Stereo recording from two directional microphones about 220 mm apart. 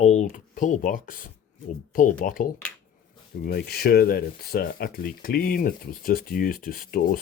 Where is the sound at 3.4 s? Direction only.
45° left (ahead or behind).